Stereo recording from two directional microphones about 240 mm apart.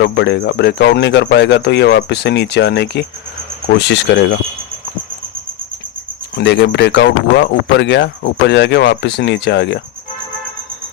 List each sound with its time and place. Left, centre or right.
0.0 s speech: left
6.3 s speech: left